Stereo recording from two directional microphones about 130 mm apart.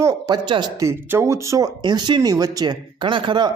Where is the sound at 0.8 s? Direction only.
20° right (ahead or behind).